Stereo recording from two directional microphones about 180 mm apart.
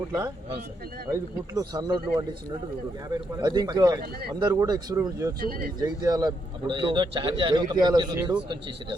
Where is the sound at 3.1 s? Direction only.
25° right (ahead or behind).